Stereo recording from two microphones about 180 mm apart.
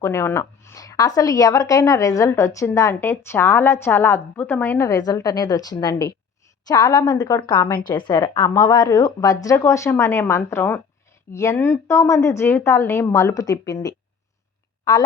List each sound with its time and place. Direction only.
0.0 s a woman's voice: 15° left (ahead or behind)